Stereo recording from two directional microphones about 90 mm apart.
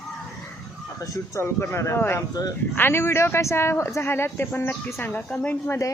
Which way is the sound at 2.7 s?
25° left (ahead or behind).